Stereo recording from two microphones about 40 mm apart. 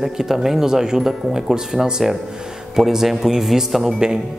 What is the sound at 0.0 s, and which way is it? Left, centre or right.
Speech, centre.